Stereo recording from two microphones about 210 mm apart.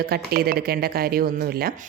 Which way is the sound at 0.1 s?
45° right (ahead or behind).